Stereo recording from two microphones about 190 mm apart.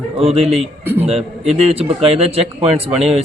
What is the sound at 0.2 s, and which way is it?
A man's voice, 35° right (ahead or behind).